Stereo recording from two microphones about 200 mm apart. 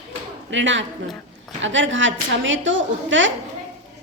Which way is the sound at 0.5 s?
70° right (ahead or behind).